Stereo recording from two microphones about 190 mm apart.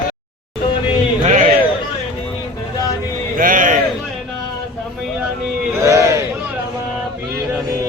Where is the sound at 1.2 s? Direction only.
40° right (ahead or behind).